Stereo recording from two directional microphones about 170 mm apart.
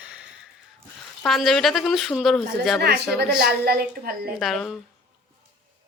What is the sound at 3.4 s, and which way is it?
Speech, 65° right (ahead or behind).